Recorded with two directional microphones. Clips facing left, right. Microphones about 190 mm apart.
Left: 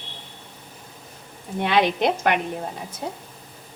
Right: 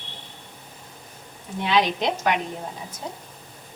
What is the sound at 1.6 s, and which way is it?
Speech, 55° left (ahead or behind).